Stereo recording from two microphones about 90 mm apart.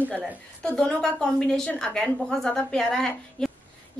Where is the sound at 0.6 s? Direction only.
10° left (ahead or behind).